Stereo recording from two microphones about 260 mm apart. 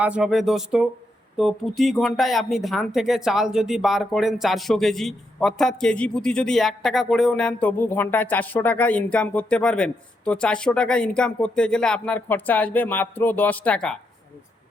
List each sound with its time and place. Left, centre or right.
0.0 s speech: centre